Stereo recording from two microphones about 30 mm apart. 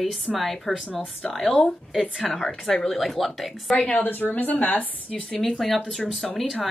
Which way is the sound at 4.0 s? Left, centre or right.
Left.